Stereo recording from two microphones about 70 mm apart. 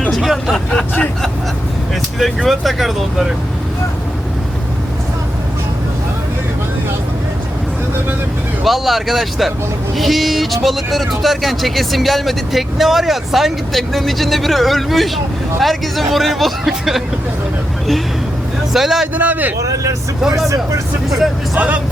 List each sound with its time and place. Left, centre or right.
0.1 s vehicle: centre
0.7 s vehicle: centre
2.1 s speech: centre
8.6 s speech: centre
18.7 s speech: centre
19.1 s a man's voice: right
19.7 s speech: right
21.5 s a man's voice: right